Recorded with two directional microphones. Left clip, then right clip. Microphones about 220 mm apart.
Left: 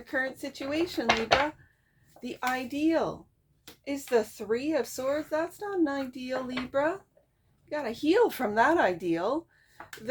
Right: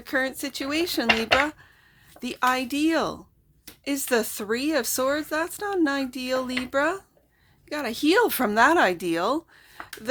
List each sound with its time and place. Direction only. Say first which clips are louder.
0.0 s speech: right 5 dB; 40° right (ahead or behind)
2.2 s speech: right 8 dB; 35° right (ahead or behind)